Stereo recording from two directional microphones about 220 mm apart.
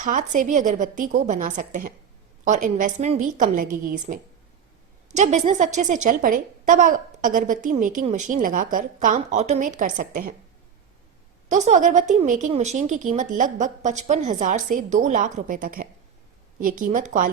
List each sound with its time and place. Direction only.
0.0 s a woman's voice: 35° right (ahead or behind)
11.4 s a woman's voice: 35° right (ahead or behind)